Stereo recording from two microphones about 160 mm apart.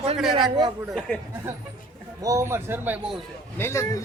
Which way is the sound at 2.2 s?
20° right (ahead or behind).